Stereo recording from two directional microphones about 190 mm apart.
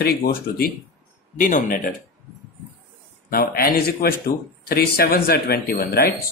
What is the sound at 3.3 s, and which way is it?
Speech, 50° left (ahead or behind).